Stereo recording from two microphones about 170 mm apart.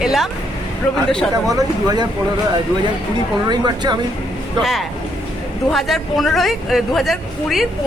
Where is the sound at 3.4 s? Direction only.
25° right (ahead or behind).